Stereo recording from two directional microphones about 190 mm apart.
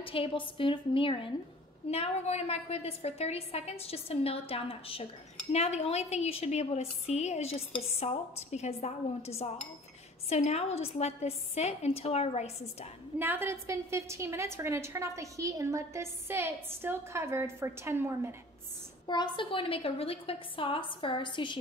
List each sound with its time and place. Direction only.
0.0 s a woman's voice: 30° left (ahead or behind)
13.2 s a woman's voice: 10° right (ahead or behind)
19.0 s a woman's voice: 25° left (ahead or behind)